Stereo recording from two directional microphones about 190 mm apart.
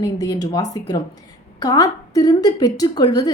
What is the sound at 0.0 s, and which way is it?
A woman's voice, 20° left (ahead or behind).